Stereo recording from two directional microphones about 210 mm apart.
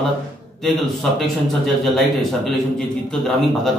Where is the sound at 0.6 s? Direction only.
Centre (ahead or behind).